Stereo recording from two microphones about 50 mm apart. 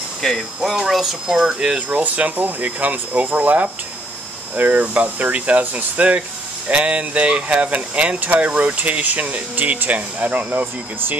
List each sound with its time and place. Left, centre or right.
0.7 s speech: centre
1.8 s speech: right